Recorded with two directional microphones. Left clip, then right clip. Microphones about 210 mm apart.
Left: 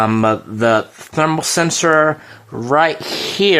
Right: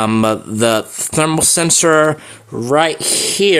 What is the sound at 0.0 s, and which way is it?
Speech, 30° right (ahead or behind).